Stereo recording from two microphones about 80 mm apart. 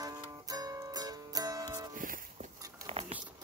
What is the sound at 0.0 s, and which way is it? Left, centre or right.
Music, right.